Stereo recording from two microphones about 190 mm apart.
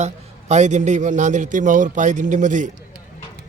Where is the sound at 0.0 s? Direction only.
35° right (ahead or behind).